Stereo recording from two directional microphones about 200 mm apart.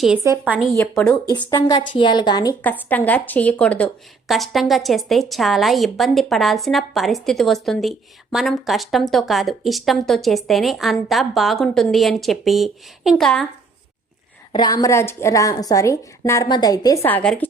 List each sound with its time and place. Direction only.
0.2 s a woman's voice: 10° right (ahead or behind)
0.8 s a woman's voice: 5° left (ahead or behind)
1.5 s a woman's voice: 20° left (ahead or behind)
2.6 s a woman's voice: 10° left (ahead or behind)
14.5 s a woman's voice: 20° left (ahead or behind)